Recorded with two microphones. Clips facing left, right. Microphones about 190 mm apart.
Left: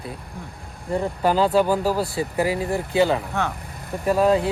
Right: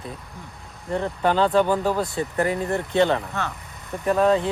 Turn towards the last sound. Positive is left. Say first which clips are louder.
# left 1 dB
turn(degrees=5)  # may be behind; listen again after turning